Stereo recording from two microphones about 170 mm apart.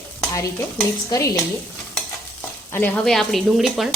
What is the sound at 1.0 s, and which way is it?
Stir, 20° left (ahead or behind).